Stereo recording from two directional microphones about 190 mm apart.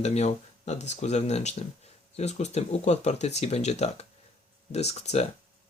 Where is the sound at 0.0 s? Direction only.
35° left (ahead or behind).